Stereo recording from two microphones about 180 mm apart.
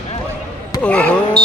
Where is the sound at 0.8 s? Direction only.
5° left (ahead or behind).